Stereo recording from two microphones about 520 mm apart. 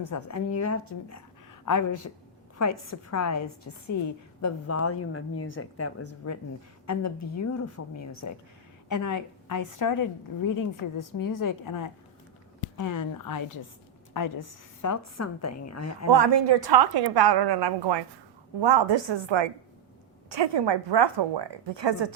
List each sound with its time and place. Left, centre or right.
0.0 s a woman's voice: left
16.0 s a woman's voice: right